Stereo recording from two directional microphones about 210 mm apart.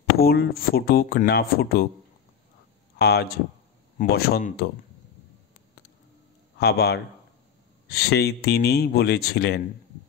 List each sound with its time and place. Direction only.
0.2 s speech: 45° left (ahead or behind)
3.0 s speech: 50° left (ahead or behind)
6.6 s speech: 50° left (ahead or behind)